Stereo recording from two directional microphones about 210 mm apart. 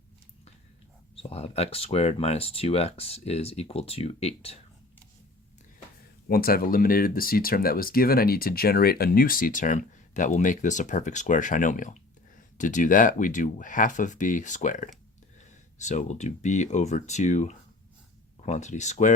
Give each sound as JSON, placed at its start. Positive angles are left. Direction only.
{"t": 1.1, "sound": "speech", "side_deg": 30}
{"t": 6.2, "sound": "speech", "side_deg": 45}